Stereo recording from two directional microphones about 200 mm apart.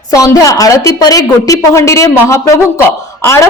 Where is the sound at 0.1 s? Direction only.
15° left (ahead or behind).